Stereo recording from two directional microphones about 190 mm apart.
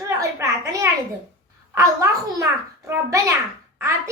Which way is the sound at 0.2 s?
15° right (ahead or behind).